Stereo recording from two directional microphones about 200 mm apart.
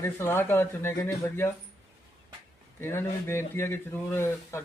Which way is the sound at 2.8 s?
10° left (ahead or behind).